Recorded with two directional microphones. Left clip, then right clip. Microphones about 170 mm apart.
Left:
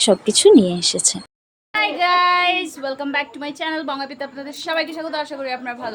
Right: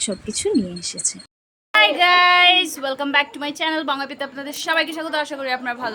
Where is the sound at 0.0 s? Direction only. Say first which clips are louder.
Left 11 dB; 20° left (ahead or behind).